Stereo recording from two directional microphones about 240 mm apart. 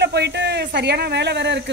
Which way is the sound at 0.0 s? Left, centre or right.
Right.